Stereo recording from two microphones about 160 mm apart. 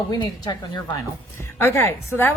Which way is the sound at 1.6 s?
15° left (ahead or behind).